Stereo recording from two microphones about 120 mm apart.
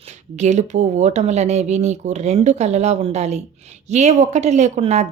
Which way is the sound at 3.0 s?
60° right (ahead or behind).